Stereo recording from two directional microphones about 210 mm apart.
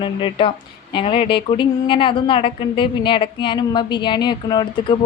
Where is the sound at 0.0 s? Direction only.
25° left (ahead or behind).